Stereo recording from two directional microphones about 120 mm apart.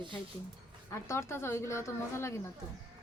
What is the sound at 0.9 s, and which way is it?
A woman's voice, 25° left (ahead or behind).